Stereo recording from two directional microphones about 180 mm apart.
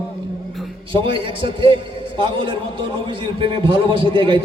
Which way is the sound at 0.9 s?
30° right (ahead or behind).